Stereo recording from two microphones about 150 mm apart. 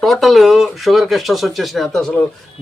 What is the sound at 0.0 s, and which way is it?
Speech, centre (ahead or behind).